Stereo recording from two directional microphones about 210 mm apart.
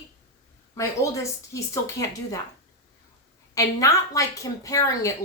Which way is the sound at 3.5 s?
15° left (ahead or behind).